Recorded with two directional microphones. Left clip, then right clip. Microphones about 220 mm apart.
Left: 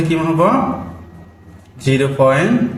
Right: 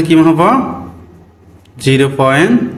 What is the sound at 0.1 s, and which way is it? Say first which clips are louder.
Speech: right 7 dB; 40° right (ahead or behind).